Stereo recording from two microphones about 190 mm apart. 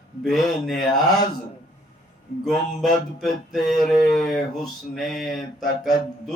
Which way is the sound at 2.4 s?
Centre (ahead or behind).